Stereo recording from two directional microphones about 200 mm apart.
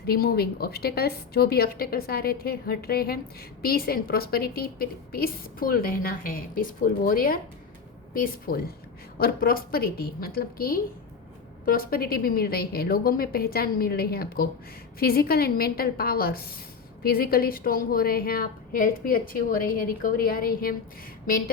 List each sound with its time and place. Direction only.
0.0 s a woman's voice: 50° left (ahead or behind)